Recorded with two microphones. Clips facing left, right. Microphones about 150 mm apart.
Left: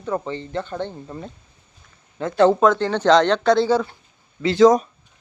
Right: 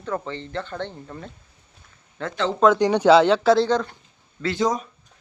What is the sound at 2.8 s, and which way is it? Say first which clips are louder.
Speech: right 1 dB; 10° right (ahead or behind).